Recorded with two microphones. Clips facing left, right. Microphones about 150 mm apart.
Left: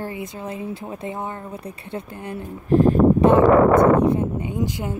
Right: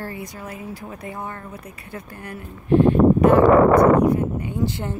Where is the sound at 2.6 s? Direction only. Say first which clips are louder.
Even; 40° left (ahead or behind).